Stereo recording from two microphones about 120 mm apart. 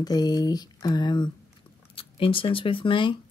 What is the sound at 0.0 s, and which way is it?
Speech, 35° left (ahead or behind).